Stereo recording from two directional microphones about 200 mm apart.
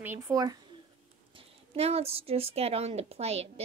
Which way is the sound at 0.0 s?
15° right (ahead or behind).